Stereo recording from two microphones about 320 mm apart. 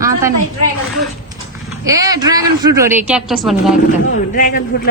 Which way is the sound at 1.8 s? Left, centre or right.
Centre.